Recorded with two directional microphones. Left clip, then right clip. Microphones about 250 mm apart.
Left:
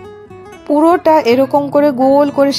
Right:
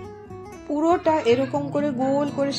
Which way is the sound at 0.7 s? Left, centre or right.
Left.